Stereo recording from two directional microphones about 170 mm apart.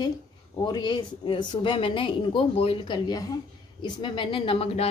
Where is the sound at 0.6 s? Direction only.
25° left (ahead or behind).